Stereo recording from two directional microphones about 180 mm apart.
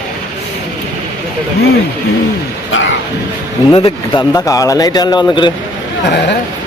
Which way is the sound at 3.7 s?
25° left (ahead or behind).